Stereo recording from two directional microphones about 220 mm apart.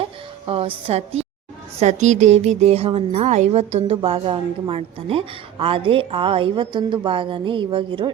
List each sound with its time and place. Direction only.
0.0 s a woman's voice: 25° right (ahead or behind)